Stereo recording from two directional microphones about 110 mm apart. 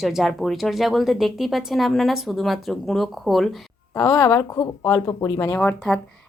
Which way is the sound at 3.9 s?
25° left (ahead or behind).